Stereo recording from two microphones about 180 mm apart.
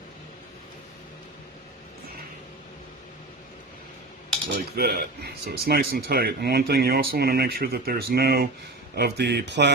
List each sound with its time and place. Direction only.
4.8 s speech: 55° right (ahead or behind)